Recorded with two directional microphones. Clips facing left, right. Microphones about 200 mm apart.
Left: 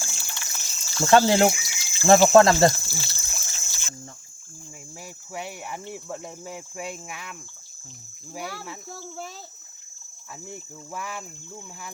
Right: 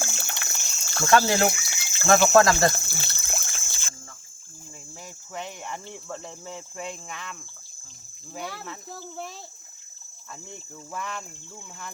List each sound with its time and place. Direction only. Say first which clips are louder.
0.0 s water: right 6 dB; 60° right (ahead or behind)
1.1 s speech: left 3 dB; 25° left (ahead or behind)
1.7 s a sound: left 1 dB; 60° right (ahead or behind)
2.0 s speech: left 3 dB; 25° left (ahead or behind)
2.7 s water: right 1 dB; 55° right (ahead or behind)
5.3 s cricket: left 1 dB; 10° left (ahead or behind)
8.3 s speech: left 1 dB; 5° left (ahead or behind)
10.5 s cricket: left 1 dB; 5° left (ahead or behind)